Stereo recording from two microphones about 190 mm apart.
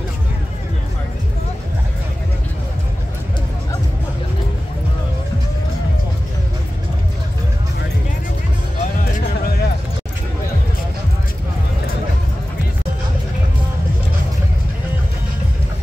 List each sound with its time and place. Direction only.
9.0 s music: 50° left (ahead or behind)